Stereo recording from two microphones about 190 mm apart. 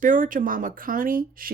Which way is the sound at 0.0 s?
45° right (ahead or behind).